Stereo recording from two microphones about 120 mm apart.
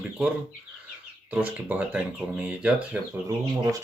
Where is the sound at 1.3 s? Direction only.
10° right (ahead or behind).